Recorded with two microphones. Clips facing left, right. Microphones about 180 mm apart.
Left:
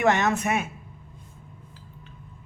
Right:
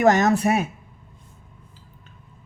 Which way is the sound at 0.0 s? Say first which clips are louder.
Right 5 dB; 40° right (ahead or behind).